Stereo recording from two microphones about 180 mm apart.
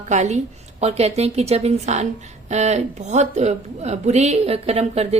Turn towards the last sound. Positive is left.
turn(degrees=-35)  # may be behind; listen again after turning